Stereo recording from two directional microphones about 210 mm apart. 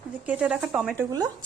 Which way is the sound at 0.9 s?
15° right (ahead or behind).